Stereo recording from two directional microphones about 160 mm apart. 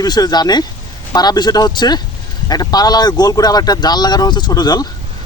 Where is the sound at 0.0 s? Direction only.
25° left (ahead or behind).